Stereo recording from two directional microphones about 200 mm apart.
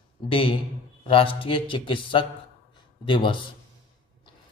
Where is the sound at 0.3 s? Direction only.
25° left (ahead or behind).